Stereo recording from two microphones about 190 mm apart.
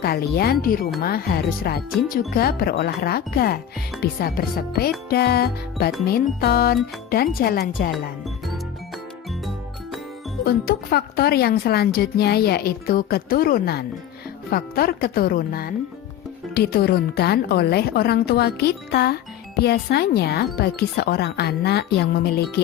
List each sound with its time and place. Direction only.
0.0 s a woman's voice: 55° left (ahead or behind)
10.4 s a woman's voice: 55° left (ahead or behind)